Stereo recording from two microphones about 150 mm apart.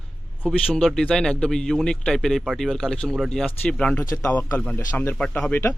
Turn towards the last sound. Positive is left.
turn(degrees=15)  # may be behind; listen again after turning